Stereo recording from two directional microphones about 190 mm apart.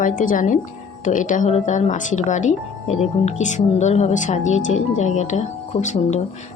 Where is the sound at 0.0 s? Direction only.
45° left (ahead or behind).